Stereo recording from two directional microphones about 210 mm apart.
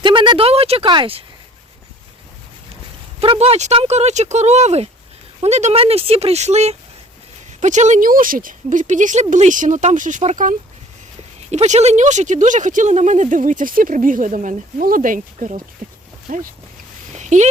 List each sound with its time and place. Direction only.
0.0 s speech: 25° right (ahead or behind)
3.2 s speech: 30° right (ahead or behind)
17.2 s a sound: 35° right (ahead or behind)